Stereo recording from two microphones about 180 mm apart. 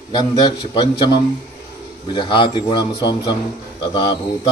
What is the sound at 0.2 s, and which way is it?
Mantra, 25° left (ahead or behind).